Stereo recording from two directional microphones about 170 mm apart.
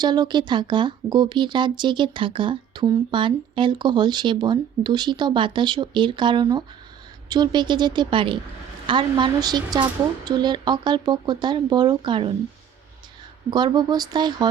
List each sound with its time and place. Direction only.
0.0 s speech: 25° right (ahead or behind)
13.5 s speech: 25° right (ahead or behind)